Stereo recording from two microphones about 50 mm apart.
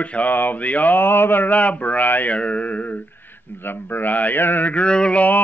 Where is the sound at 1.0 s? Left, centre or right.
Left.